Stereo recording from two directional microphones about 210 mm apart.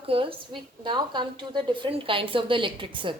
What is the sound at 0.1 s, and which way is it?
A woman's voice, 25° right (ahead or behind).